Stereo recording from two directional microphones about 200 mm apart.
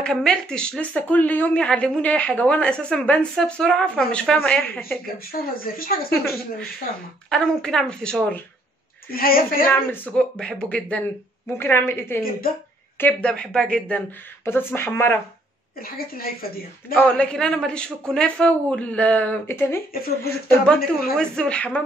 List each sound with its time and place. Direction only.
0.0 s speech: 5° left (ahead or behind)
5.3 s speech: 45° left (ahead or behind)
7.2 s speech: 5° left (ahead or behind)
9.1 s speech: 45° left (ahead or behind)
9.7 s speech: 10° left (ahead or behind)
16.9 s speech: 5° left (ahead or behind)